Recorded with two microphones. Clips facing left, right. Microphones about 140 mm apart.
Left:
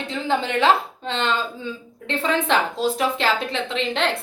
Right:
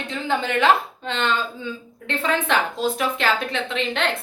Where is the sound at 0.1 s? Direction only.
25° left (ahead or behind).